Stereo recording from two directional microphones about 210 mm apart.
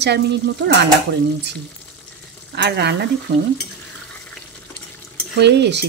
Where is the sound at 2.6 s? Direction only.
55° right (ahead or behind).